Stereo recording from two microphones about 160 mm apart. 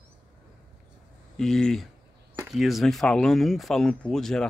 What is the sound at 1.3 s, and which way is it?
Speech, 5° left (ahead or behind).